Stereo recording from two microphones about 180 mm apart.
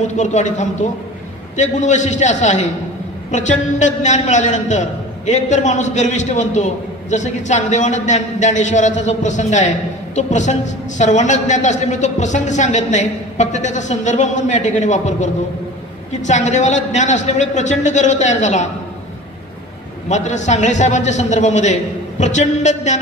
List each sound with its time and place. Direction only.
0.0 s a man's voice: 40° left (ahead or behind)
20.1 s a man's voice: 40° left (ahead or behind)